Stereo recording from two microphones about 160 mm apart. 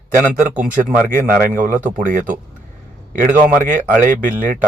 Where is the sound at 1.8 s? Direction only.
55° right (ahead or behind).